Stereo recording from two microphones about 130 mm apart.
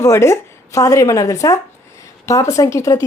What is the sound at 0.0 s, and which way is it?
A woman's voice, 20° left (ahead or behind).